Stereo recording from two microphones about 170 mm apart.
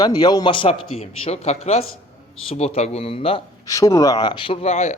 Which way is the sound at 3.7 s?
20° left (ahead or behind).